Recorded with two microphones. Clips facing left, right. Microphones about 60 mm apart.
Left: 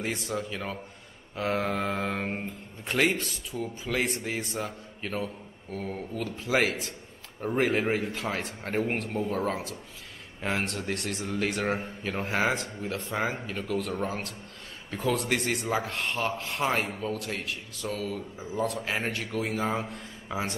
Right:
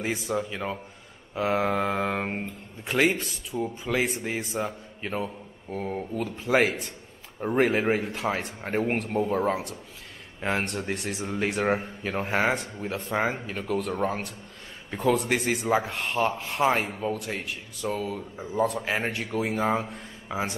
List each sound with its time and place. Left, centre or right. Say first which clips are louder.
0.0 s mantra: right 3 dB; centre
2.9 s speech: right 2 dB; centre
9.2 s mantra: right 5 dB; centre
10.4 s speech: right 2 dB; centre
18.4 s speech: right 5 dB; centre